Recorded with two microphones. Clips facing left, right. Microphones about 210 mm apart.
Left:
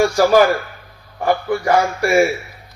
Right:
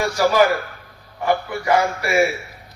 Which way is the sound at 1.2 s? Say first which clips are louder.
Left 3 dB; 45° left (ahead or behind).